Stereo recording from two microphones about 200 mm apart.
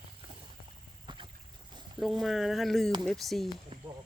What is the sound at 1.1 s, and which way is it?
Boat, 25° right (ahead or behind).